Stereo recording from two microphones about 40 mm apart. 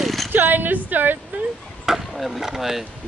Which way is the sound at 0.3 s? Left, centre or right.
Right.